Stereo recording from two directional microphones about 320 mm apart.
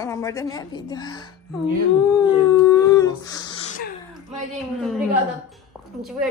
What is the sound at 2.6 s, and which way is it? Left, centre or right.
Humming, centre.